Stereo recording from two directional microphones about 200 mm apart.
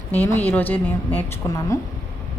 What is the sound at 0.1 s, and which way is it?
A woman's voice, 10° left (ahead or behind).